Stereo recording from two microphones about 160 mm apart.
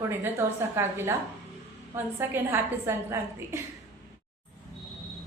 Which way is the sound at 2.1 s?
15° right (ahead or behind).